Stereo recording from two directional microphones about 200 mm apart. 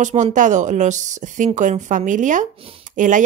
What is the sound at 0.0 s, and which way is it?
Speech, 40° right (ahead or behind).